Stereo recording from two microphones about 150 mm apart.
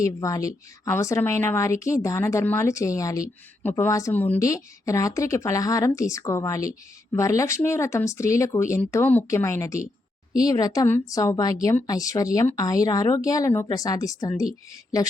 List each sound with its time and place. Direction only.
0.0 s speech: 20° left (ahead or behind)